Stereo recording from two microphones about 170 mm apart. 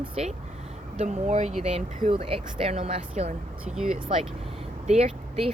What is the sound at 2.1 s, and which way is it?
Speech, 35° right (ahead or behind).